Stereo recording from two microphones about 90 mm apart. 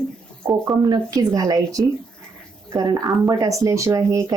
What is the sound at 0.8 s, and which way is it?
Speech, 45° right (ahead or behind).